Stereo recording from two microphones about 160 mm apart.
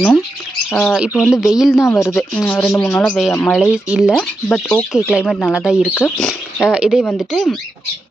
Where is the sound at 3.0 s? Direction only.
Centre (ahead or behind).